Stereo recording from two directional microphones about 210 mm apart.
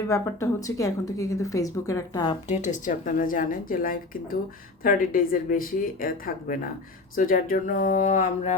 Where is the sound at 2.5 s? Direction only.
35° left (ahead or behind).